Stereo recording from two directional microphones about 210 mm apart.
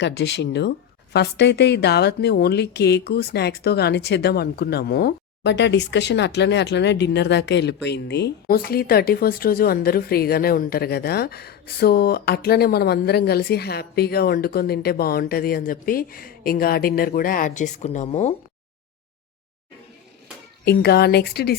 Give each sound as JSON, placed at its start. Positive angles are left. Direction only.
{"t": 0.0, "sound": "a woman's voice", "side_deg": 55}
{"t": 20.7, "sound": "a woman's voice", "side_deg": 50}